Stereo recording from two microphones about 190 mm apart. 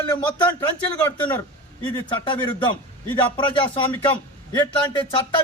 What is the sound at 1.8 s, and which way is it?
A man's voice, 25° left (ahead or behind).